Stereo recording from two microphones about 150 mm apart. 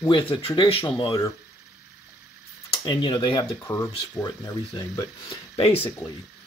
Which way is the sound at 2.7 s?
30° left (ahead or behind).